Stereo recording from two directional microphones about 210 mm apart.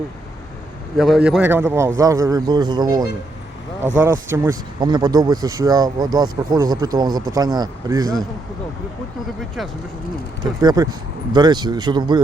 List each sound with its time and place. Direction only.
0.9 s speech: centre (ahead or behind); by 8.1 s 15° right (ahead or behind)
10.4 s speech: 20° right (ahead or behind)